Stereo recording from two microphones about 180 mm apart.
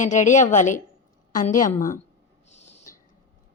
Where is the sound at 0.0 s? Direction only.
45° left (ahead or behind).